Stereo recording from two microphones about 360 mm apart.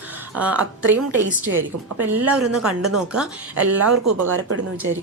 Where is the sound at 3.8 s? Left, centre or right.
Right.